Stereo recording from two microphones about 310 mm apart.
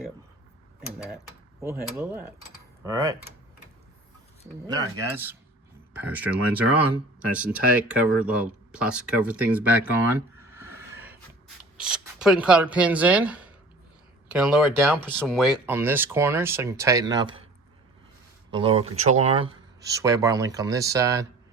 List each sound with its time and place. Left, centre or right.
0.8 s speech: centre
4.6 s speech: centre
18.5 s speech: centre